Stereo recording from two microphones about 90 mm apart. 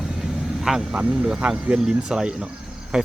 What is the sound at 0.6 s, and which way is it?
A man's voice, 5° right (ahead or behind).